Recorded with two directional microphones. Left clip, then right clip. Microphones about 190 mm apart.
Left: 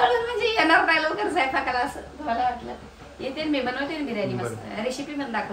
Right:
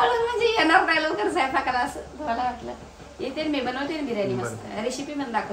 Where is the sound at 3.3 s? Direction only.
5° right (ahead or behind).